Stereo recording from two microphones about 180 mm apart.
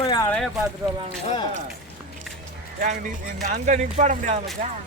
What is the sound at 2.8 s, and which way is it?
Speech, 50° right (ahead or behind).